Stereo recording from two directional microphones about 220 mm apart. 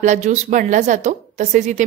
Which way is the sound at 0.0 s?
35° right (ahead or behind).